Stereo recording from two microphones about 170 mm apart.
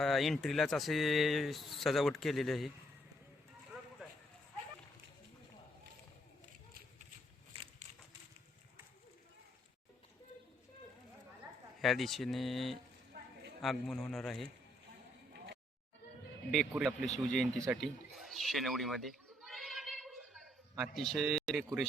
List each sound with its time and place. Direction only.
0.0 s speech: centre (ahead or behind)
3.7 s clip-clop: centre (ahead or behind)
7.5 s crushing: 30° right (ahead or behind)
11.8 s speech: centre (ahead or behind)
13.1 s a sound: 65° right (ahead or behind)
13.6 s speech: centre (ahead or behind)
16.5 s speech: centre (ahead or behind)
17.7 s a sound: centre (ahead or behind)